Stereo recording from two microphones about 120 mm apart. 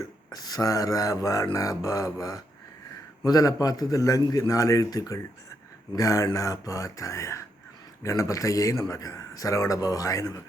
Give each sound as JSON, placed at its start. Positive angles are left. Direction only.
{"t": 0.3, "sound": "a man's voice", "side_deg": 30}